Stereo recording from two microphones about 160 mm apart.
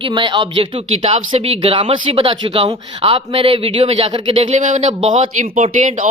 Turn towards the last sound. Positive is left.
turn(degrees=-50)  # may be behind; listen again after turning